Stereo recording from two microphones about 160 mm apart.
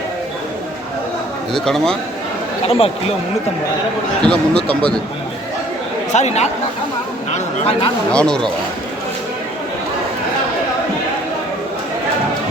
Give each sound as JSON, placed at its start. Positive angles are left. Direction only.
{"t": 1.5, "sound": "a man's voice", "side_deg": 5}
{"t": 2.6, "sound": "speech", "side_deg": 35}
{"t": 4.3, "sound": "speech", "side_deg": 5}
{"t": 6.1, "sound": "speech", "side_deg": 45}
{"t": 8.1, "sound": "a man's voice", "side_deg": 5}